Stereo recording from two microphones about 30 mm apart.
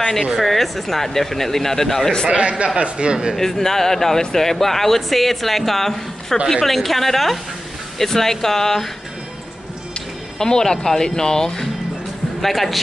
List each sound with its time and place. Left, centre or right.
0.4 s speech: centre
2.2 s speech: right
3.3 s a woman's voice: centre
10.4 s speech: left
12.4 s a woman's voice: centre